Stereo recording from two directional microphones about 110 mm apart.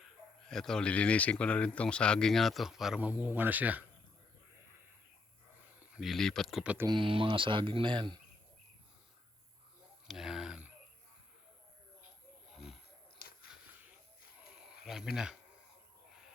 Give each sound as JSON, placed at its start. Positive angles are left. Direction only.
{"t": 0.0, "sound": "speech", "side_deg": 5}
{"t": 3.0, "sound": "speech", "side_deg": -15}
{"t": 5.6, "sound": "speech", "side_deg": -10}
{"t": 6.8, "sound": "speech", "side_deg": -50}
{"t": 10.1, "sound": "a sound", "side_deg": -5}
{"t": 12.5, "sound": "snoring", "side_deg": -5}
{"t": 14.6, "sound": "a sound", "side_deg": -5}